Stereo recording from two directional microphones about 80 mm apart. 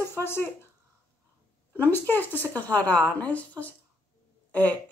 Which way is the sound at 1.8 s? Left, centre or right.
Left.